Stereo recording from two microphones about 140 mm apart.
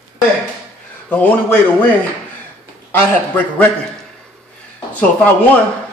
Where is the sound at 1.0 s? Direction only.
10° left (ahead or behind).